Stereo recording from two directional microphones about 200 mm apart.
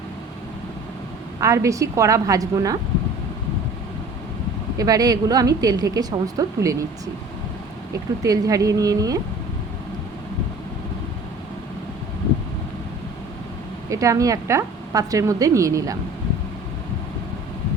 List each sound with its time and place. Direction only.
1.4 s a woman's voice: 15° right (ahead or behind)
4.8 s a woman's voice: 20° right (ahead or behind)
8.2 s a woman's voice: 15° right (ahead or behind)
13.9 s a woman's voice: 15° right (ahead or behind)